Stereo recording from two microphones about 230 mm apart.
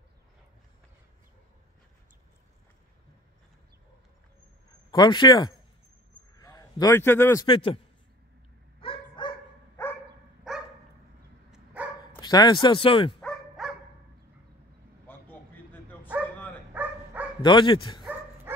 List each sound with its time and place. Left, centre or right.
4.9 s a man's voice: centre
8.8 s dog: left
11.5 s dog: centre
12.2 s speech: centre
13.2 s bow-wow: centre
15.0 s a sound: centre
16.7 s dog: centre
17.4 s speech: centre